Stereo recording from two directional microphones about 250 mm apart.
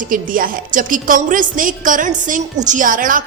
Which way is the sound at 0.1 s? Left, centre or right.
Right.